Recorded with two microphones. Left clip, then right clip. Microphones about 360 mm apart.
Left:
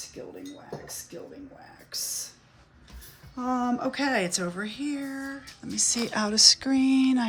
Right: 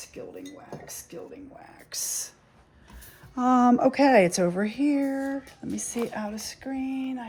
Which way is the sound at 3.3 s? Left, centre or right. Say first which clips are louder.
Right 7 dB; right.